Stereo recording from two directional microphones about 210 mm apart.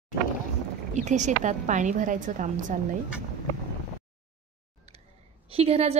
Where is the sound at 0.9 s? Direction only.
35° right (ahead or behind).